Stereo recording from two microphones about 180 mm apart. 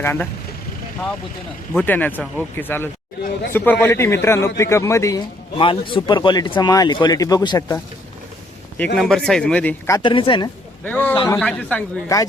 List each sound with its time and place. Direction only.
0.0 s speech: 10° left (ahead or behind)
1.7 s a man's voice: 10° left (ahead or behind)
9.0 s speech: 5° left (ahead or behind)
10.0 s a man's voice: 25° left (ahead or behind)
10.8 s speech: 10° left (ahead or behind)